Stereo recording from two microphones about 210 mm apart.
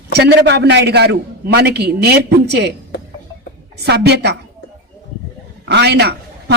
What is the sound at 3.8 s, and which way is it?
Speech, 50° right (ahead or behind).